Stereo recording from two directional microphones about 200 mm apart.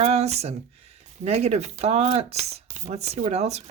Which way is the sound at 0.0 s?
30° right (ahead or behind).